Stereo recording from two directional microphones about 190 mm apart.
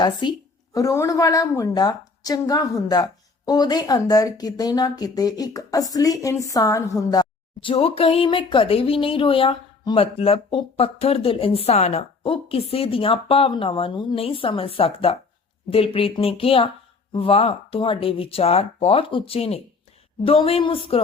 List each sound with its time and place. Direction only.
0.0 s a woman's voice: 25° left (ahead or behind)